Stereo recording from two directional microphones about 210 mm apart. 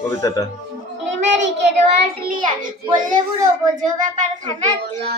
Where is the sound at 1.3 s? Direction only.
55° right (ahead or behind).